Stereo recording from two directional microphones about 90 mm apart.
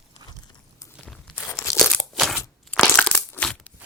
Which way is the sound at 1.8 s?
5° left (ahead or behind).